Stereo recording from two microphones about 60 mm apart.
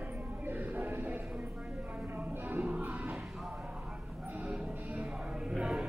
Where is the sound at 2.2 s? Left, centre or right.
Right.